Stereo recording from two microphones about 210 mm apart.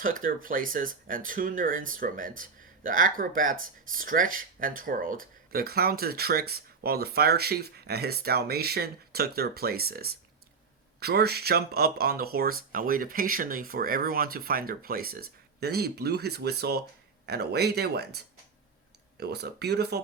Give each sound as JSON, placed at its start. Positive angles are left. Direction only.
{"t": 0.0, "sound": "speech", "side_deg": -40}